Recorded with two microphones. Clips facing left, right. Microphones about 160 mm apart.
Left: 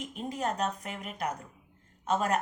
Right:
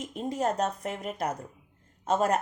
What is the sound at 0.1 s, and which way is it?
A woman's voice, 35° right (ahead or behind).